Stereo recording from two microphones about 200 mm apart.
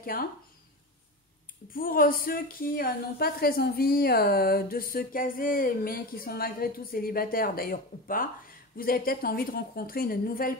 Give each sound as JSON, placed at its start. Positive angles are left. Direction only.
{"t": 0.0, "sound": "speech", "side_deg": 45}
{"t": 1.7, "sound": "a woman's voice", "side_deg": 45}